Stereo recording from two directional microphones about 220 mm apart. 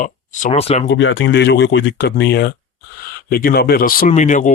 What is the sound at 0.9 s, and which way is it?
Speech, 55° left (ahead or behind).